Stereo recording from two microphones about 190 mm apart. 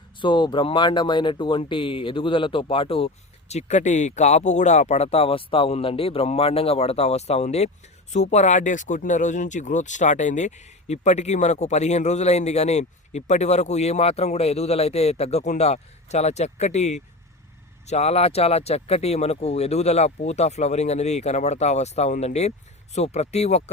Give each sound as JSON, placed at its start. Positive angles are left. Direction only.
{"t": 0.2, "sound": "speech", "side_deg": 25}